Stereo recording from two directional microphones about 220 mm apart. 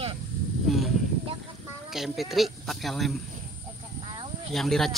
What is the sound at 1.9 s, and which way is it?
Speech, centre (ahead or behind).